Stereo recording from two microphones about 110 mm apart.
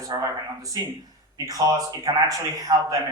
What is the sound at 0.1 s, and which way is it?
Speech, 35° right (ahead or behind).